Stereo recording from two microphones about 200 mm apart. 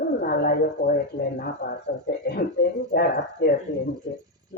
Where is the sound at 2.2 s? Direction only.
50° left (ahead or behind).